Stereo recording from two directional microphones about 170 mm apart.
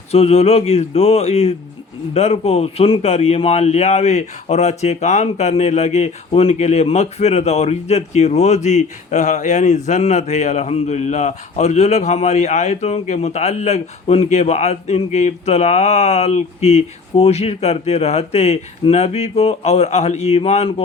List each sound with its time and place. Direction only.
0.1 s speech: 40° left (ahead or behind)